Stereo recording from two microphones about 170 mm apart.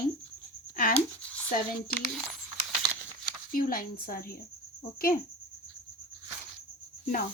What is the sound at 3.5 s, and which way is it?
Speech, 60° left (ahead or behind).